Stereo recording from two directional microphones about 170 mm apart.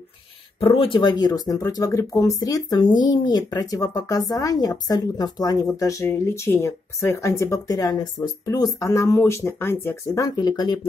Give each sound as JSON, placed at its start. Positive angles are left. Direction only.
{"t": 0.6, "sound": "speech", "side_deg": 30}